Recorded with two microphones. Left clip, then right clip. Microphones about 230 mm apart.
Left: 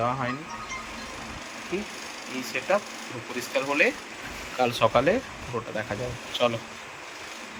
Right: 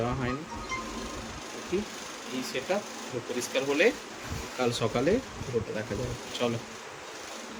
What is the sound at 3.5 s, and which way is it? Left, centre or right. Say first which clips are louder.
Speech: left 2 dB; centre.